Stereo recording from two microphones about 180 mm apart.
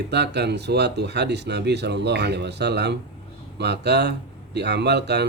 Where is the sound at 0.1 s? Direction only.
70° right (ahead or behind).